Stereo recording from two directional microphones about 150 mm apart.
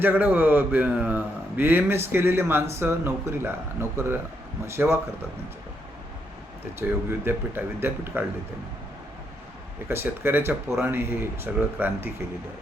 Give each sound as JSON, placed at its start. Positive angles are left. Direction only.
{"t": 0.0, "sound": "a man's voice", "side_deg": -10}
{"t": 6.8, "sound": "a man's voice", "side_deg": -15}
{"t": 9.9, "sound": "a man's voice", "side_deg": -15}